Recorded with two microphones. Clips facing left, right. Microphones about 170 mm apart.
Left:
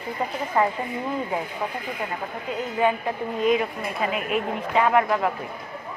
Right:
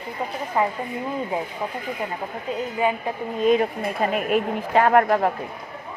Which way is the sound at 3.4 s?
40° right (ahead or behind).